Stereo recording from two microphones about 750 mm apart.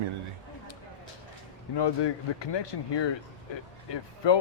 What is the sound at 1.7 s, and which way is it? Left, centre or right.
Speech, left.